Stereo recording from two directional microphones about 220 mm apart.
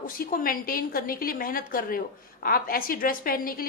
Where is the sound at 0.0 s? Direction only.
40° left (ahead or behind).